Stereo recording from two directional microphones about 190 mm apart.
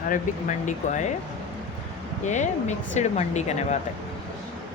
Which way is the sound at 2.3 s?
40° left (ahead or behind).